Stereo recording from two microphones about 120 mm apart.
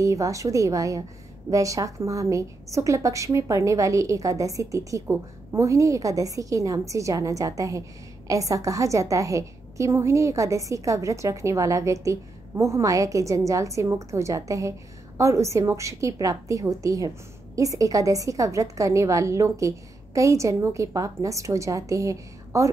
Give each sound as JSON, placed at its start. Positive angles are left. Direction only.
{"t": 0.0, "sound": "a woman's voice", "side_deg": -25}